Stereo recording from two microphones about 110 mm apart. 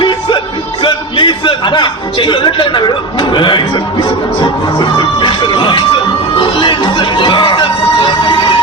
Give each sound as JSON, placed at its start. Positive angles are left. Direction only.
{"t": 0.0, "sound": "music", "side_deg": 45}
{"t": 4.8, "sound": "music", "side_deg": 45}